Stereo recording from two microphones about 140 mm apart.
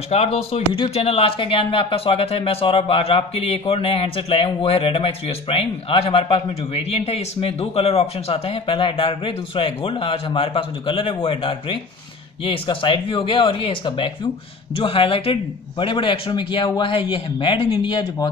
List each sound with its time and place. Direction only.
0.1 s speech: 50° left (ahead or behind)